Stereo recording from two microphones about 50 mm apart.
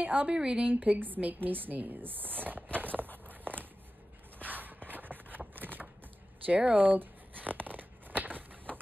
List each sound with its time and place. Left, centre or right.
0.0 s speech: right
0.3 s speech: centre
0.7 s speech: right
3.3 s walk: right
4.4 s shuffle: right
5.5 s a sound: right
6.4 s tearing: right